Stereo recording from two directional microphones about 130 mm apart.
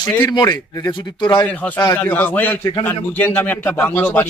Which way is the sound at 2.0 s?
15° left (ahead or behind).